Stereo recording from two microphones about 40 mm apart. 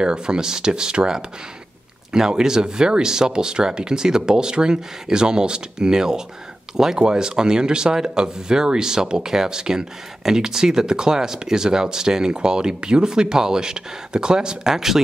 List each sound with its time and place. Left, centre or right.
0.0 s speech: centre